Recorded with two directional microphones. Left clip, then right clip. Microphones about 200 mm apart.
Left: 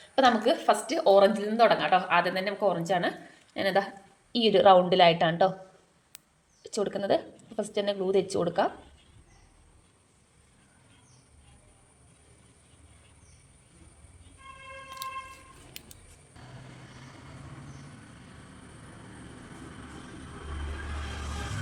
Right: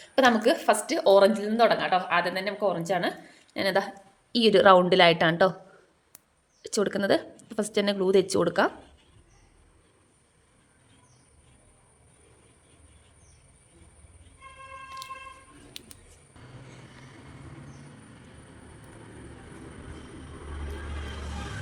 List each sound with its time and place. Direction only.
0.2 s a woman's voice: 30° right (ahead or behind)
1.4 s a woman's voice: 10° right (ahead or behind); by 5.5 s 30° right (ahead or behind)
6.6 s speech: 30° right (ahead or behind)